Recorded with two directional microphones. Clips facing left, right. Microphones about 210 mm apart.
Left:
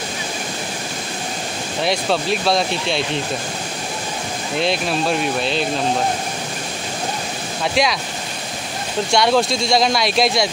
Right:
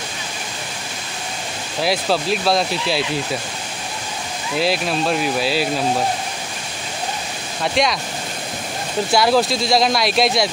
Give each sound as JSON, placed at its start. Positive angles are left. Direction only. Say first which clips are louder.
{"t": 1.8, "sound": "speech", "louder": "even", "side_deg": 0}
{"t": 4.6, "sound": "speech", "louder": "right 1 dB", "side_deg": 0}
{"t": 7.6, "sound": "speech", "louder": "even", "side_deg": 0}
{"t": 9.1, "sound": "speech", "louder": "even", "side_deg": 0}